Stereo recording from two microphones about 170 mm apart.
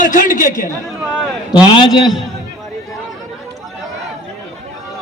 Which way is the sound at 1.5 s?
25° left (ahead or behind).